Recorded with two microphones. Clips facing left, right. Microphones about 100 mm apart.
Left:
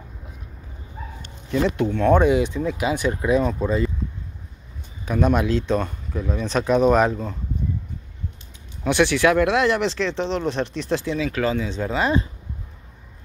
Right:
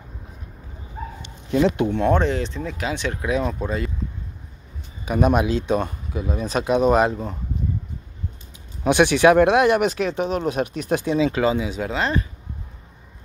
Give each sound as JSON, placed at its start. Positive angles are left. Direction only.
{"t": 1.0, "sound": "bow-wow", "side_deg": -40}
{"t": 1.8, "sound": "speech", "side_deg": -20}
{"t": 2.1, "sound": "speech", "side_deg": 10}
{"t": 5.0, "sound": "speech", "side_deg": -15}
{"t": 8.8, "sound": "speech", "side_deg": -20}